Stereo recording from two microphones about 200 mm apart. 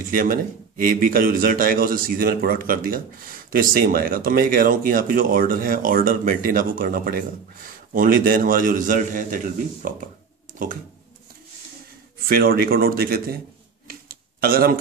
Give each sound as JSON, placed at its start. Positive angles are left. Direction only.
{"t": 0.0, "sound": "a man's voice", "side_deg": -45}
{"t": 12.3, "sound": "a man's voice", "side_deg": -50}
{"t": 13.8, "sound": "a sound", "side_deg": -45}